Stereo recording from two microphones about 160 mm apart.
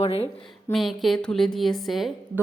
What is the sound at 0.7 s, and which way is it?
A woman's voice, centre (ahead or behind).